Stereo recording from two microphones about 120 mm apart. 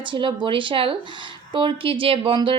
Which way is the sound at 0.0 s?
45° right (ahead or behind).